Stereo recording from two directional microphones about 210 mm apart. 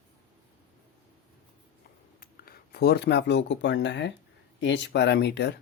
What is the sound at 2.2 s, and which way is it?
Speech, 45° left (ahead or behind).